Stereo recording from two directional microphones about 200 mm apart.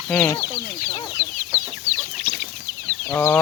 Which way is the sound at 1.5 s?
10° right (ahead or behind).